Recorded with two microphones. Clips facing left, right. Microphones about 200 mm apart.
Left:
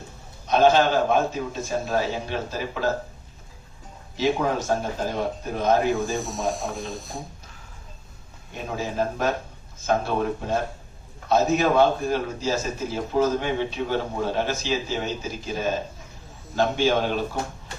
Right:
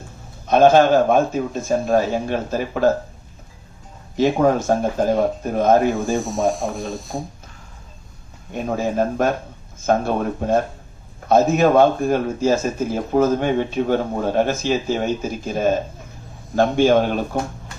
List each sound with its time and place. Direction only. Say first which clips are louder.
0.4 s speech: right 5 dB; 50° right (ahead or behind)
4.2 s speech: right 7 dB; 50° right (ahead or behind)
6.1 s speech: right 7 dB; centre (ahead or behind)
8.5 s speech: right 6 dB; 50° right (ahead or behind)